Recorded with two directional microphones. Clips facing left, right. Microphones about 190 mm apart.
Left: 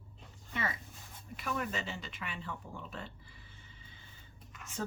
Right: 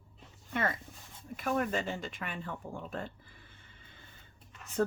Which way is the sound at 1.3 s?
50° right (ahead or behind).